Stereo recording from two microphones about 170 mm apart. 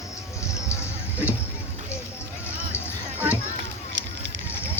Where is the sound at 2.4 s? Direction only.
15° left (ahead or behind).